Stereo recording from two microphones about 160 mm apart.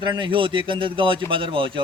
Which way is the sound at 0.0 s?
30° right (ahead or behind).